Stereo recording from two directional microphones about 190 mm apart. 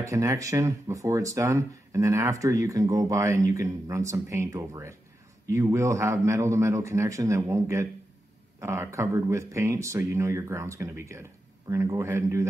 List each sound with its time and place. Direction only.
0.0 s speech: 15° right (ahead or behind)